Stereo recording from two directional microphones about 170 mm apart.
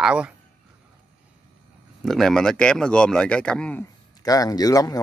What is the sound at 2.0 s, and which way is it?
Speech, centre (ahead or behind).